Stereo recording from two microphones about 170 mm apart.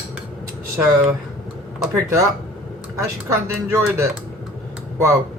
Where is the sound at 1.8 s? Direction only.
15° right (ahead or behind).